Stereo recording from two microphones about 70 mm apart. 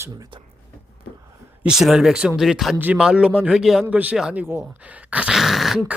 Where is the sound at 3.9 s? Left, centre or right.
Centre.